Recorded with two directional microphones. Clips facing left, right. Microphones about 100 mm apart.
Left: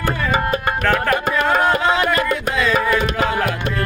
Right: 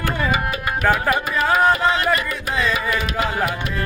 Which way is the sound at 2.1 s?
90° left.